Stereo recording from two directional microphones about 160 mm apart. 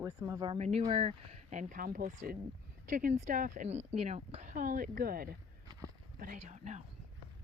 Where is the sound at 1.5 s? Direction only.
50° right (ahead or behind).